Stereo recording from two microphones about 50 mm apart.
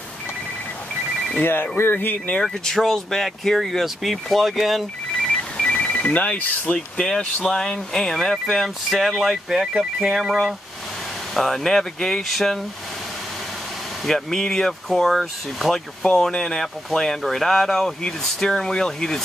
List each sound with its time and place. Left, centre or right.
1.4 s speech: left
2.4 s speech: centre
5.2 s a sound: centre
5.8 s speech: left
7.4 s speech: centre
9.1 s speech: centre
14.0 s speech: centre
16.0 s speech: centre